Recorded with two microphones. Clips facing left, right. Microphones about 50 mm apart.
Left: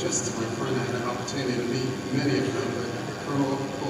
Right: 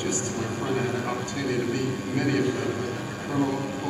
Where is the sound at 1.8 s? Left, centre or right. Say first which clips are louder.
Right 1 dB; centre.